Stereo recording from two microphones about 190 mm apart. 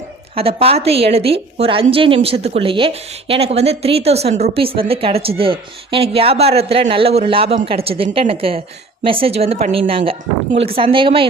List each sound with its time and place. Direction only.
0.3 s a woman's voice: 30° right (ahead or behind)